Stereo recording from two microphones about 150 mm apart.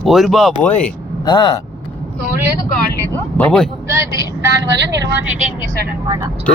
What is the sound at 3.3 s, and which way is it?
Speech, 5° left (ahead or behind).